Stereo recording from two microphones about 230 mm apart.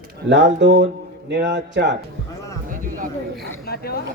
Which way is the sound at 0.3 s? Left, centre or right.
Right.